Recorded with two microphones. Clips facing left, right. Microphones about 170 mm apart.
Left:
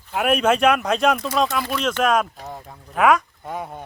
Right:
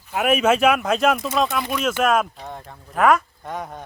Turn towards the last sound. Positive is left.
turn(degrees=5)  # may be behind; listen again after turning